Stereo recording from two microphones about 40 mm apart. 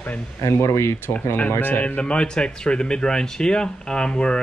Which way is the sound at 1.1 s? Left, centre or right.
Left.